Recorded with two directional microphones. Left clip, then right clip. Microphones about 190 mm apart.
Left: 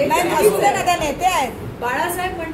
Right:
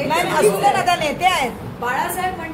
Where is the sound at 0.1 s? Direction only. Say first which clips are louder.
Left 1 dB; 15° right (ahead or behind).